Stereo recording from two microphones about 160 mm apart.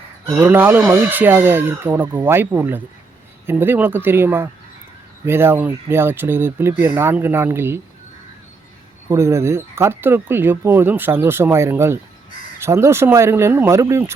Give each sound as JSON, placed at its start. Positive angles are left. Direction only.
{"t": 0.3, "sound": "speech", "side_deg": -15}
{"t": 9.0, "sound": "speech", "side_deg": -15}